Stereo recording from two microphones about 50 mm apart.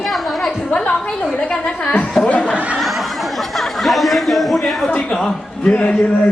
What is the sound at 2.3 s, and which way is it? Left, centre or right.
Laughter, left.